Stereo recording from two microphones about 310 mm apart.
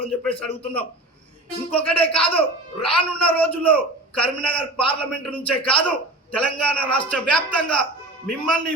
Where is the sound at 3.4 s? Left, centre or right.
Centre.